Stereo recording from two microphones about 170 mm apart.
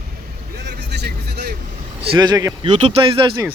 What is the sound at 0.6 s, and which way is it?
Vehicle, 80° right.